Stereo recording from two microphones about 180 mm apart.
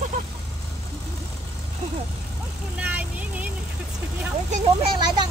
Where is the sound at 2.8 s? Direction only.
5° right (ahead or behind).